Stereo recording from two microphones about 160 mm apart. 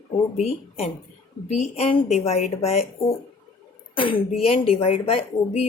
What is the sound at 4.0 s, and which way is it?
Speech, 35° left (ahead or behind).